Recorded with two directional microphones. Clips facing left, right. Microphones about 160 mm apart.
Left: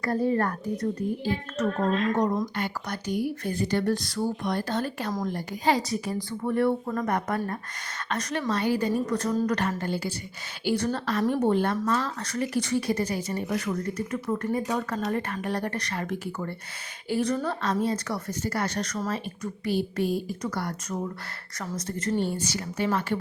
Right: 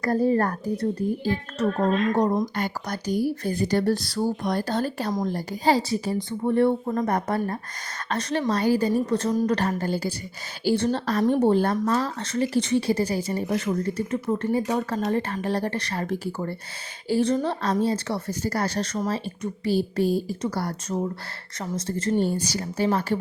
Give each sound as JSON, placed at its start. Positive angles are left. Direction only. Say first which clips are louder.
{"t": 0.0, "sound": "a woman's voice", "louder": "right 3 dB", "side_deg": -40}
{"t": 12.3, "sound": "a woman's voice", "louder": "right 4 dB", "side_deg": -25}